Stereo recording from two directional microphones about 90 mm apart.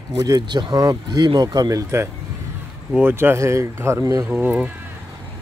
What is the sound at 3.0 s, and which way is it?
Speech, 25° right (ahead or behind).